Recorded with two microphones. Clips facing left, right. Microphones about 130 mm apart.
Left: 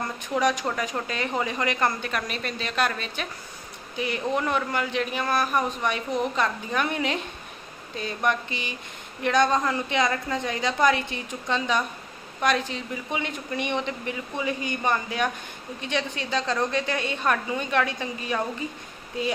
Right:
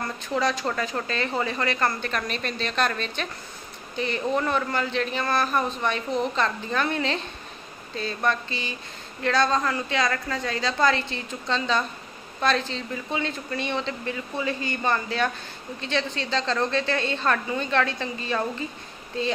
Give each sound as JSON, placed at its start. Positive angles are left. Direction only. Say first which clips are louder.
{"t": 0.0, "sound": "a man's voice", "louder": "left 1 dB", "side_deg": 15}